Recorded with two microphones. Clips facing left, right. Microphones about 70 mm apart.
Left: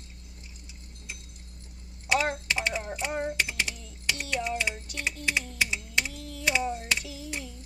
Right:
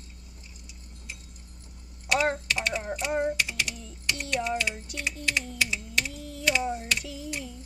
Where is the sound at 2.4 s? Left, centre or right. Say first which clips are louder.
Right 1 dB; left.